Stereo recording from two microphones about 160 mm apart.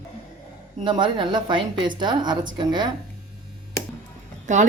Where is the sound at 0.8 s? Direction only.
30° right (ahead or behind).